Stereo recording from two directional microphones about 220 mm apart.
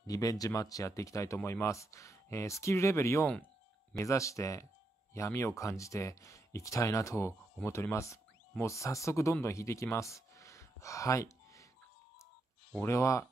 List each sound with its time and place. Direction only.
0.0 s speech: 15° left (ahead or behind)
12.7 s speech: 10° left (ahead or behind)